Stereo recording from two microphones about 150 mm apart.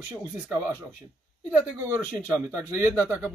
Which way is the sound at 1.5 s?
20° right (ahead or behind).